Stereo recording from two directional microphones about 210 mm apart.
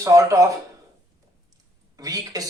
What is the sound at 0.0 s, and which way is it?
Speech, 15° right (ahead or behind).